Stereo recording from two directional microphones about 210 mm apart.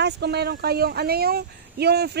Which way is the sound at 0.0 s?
50° right (ahead or behind).